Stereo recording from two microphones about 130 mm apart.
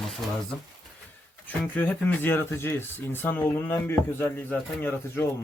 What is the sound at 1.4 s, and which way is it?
Speech, 10° left (ahead or behind).